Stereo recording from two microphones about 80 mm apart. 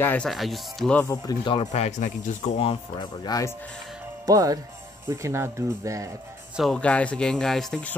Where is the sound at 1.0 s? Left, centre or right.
Left.